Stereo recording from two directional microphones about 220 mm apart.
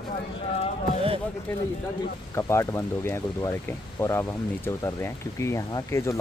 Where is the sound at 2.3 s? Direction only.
15° left (ahead or behind).